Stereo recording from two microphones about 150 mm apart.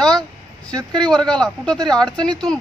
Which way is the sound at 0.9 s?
5° left (ahead or behind).